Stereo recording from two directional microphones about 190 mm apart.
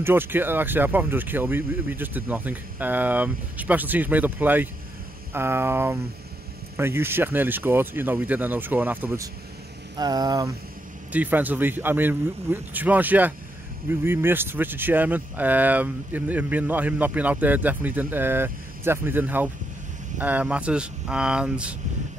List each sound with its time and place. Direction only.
0.0 s speech: 10° right (ahead or behind)
9.9 s a sound: 20° right (ahead or behind)
11.1 s speech: 10° right (ahead or behind)